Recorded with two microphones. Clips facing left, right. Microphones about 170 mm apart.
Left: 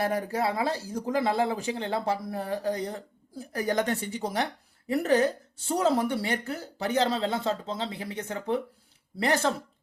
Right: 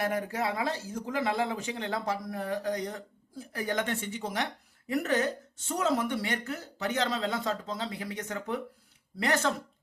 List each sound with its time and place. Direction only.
0.0 s speech: 35° left (ahead or behind)